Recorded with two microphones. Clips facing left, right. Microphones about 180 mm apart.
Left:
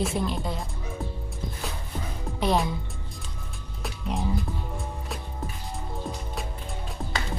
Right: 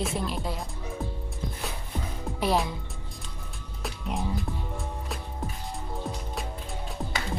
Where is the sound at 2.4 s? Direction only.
Centre (ahead or behind).